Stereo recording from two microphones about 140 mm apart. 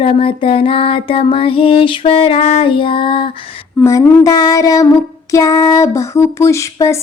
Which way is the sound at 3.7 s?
20° left (ahead or behind).